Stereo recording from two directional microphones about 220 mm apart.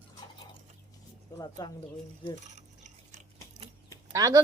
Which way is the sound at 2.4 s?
35° right (ahead or behind).